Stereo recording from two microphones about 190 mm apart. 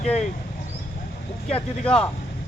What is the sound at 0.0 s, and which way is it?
Speech, 35° left (ahead or behind).